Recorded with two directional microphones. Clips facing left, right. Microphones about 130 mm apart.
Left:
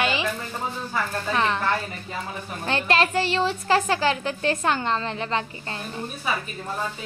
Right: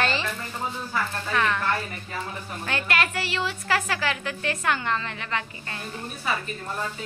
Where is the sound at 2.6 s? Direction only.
30° left (ahead or behind).